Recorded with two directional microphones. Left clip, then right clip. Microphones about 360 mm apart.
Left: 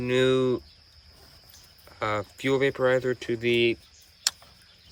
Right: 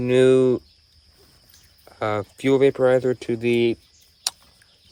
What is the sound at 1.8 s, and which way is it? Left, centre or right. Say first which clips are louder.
Cricket: right 4 dB; centre.